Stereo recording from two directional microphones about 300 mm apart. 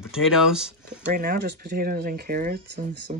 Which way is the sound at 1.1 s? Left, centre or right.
Right.